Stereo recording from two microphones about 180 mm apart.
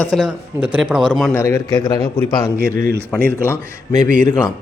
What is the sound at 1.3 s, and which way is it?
A man's voice, 15° left (ahead or behind).